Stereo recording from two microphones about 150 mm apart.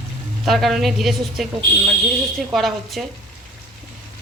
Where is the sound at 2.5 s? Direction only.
Centre (ahead or behind).